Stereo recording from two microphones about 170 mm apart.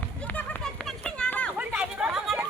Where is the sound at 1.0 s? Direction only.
5° left (ahead or behind).